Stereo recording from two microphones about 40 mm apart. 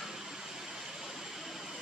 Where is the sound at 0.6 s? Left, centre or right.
Centre.